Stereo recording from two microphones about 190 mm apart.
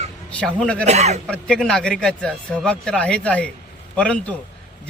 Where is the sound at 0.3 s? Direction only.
5° left (ahead or behind).